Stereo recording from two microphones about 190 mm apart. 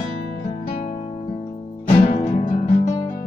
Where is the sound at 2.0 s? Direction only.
30° left (ahead or behind).